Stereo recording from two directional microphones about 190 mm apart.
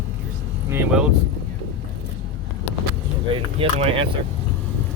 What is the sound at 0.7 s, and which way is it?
Speech, 5° right (ahead or behind).